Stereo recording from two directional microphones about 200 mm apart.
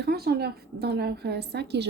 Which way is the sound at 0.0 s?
50° right (ahead or behind).